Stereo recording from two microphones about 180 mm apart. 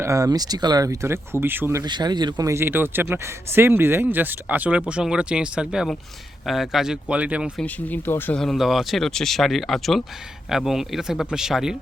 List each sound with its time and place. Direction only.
0.0 s speech: 15° right (ahead or behind)
1.8 s speech: 25° right (ahead or behind); by 7.6 s 5° right (ahead or behind)
7.6 s speech: 10° left (ahead or behind)